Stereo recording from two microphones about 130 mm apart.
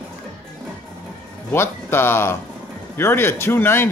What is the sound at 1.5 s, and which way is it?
Speech, 20° left (ahead or behind).